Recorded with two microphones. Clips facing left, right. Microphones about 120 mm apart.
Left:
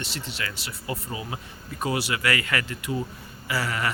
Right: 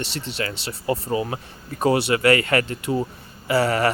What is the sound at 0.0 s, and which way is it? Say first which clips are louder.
Speech: right 6 dB; 30° right (ahead or behind).